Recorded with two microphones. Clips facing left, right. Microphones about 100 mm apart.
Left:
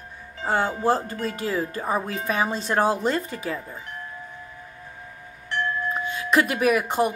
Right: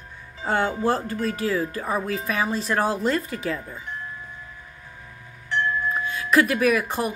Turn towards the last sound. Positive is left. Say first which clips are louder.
# left 1 dB
turn(degrees=25)  # may be behind; listen again after turning